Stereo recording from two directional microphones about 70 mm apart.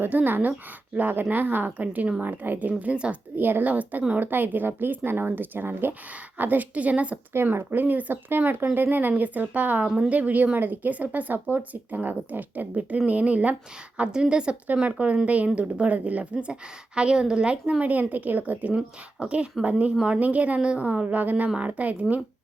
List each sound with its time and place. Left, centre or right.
0.0 s speech: right
7.3 s a woman's voice: right
18.7 s a woman's voice: centre